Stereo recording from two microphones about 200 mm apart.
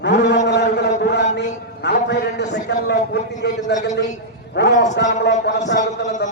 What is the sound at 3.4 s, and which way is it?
A man's voice, 55° left (ahead or behind).